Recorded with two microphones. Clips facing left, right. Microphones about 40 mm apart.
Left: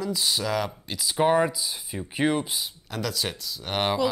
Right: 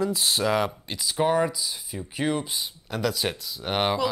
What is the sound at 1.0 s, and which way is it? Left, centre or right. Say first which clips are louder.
Speech: left 1 dB; centre.